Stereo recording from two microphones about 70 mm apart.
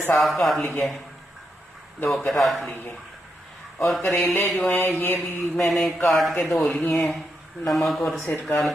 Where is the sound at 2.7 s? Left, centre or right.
Left.